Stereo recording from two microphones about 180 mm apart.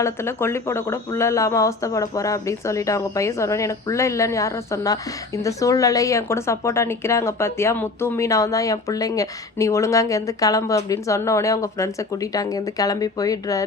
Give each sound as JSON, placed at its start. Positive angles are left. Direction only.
{"t": 0.0, "sound": "a woman's voice", "side_deg": 15}